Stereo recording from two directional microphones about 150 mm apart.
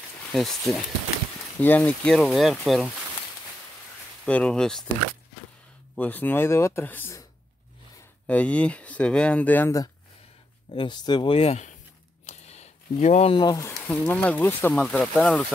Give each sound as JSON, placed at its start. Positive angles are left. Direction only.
{"t": 0.3, "sound": "speech", "side_deg": 0}
{"t": 4.3, "sound": "speech", "side_deg": 5}
{"t": 5.9, "sound": "speech", "side_deg": 10}
{"t": 8.3, "sound": "speech", "side_deg": 10}
{"t": 10.7, "sound": "speech", "side_deg": 35}
{"t": 12.3, "sound": "a sound", "side_deg": 50}
{"t": 12.9, "sound": "speech", "side_deg": 50}
{"t": 13.3, "sound": "speech", "side_deg": 25}